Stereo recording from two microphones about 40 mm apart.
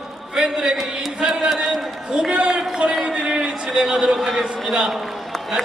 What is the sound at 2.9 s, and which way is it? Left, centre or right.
Speech, centre.